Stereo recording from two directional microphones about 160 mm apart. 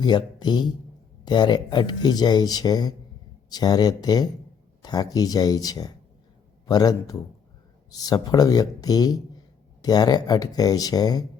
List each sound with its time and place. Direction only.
0.0 s speech: 25° left (ahead or behind)